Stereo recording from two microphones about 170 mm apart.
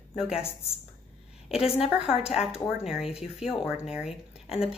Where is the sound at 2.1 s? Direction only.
35° left (ahead or behind).